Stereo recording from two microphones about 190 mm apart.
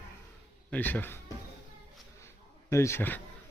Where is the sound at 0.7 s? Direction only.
10° left (ahead or behind).